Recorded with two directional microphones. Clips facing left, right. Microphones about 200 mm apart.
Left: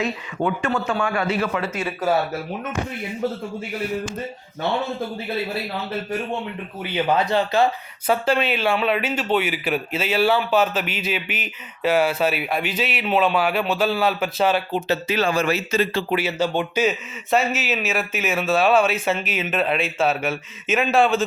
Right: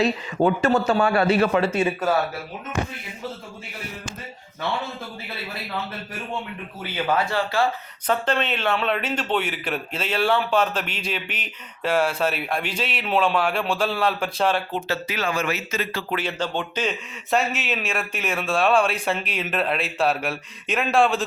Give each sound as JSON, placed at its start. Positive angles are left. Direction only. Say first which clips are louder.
{"t": 0.0, "sound": "a man's voice", "louder": "right 4 dB", "side_deg": -35}
{"t": 6.9, "sound": "speech", "louder": "left 3 dB", "side_deg": 20}
{"t": 8.0, "sound": "a man's voice", "louder": "left 3 dB", "side_deg": 10}
{"t": 14.8, "sound": "speech", "louder": "left 5 dB", "side_deg": 25}
{"t": 16.0, "sound": "a man's voice", "louder": "left 5 dB", "side_deg": 10}